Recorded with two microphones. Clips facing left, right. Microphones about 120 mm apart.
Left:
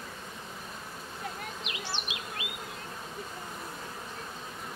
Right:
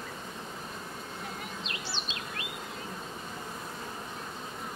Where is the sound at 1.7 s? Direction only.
15° left (ahead or behind).